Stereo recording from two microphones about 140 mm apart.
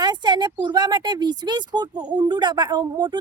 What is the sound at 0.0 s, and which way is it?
Speech, 30° right (ahead or behind).